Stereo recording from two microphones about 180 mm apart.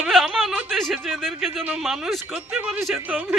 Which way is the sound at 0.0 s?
Centre (ahead or behind).